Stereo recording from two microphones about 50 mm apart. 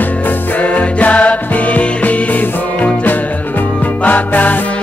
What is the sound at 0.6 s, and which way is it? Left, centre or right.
Music, left.